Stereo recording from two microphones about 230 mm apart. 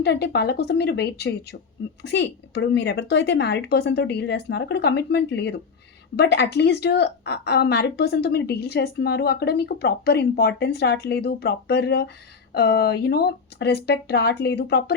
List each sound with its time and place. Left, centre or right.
0.0 s a woman's voice: left